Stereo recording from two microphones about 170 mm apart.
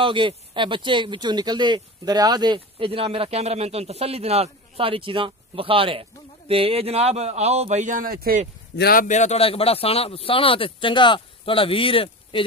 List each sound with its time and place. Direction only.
0.0 s speech: 30° right (ahead or behind); by 8.4 s 60° right (ahead or behind)
8.7 s speech: 60° left (ahead or behind); by 12.4 s 30° left (ahead or behind)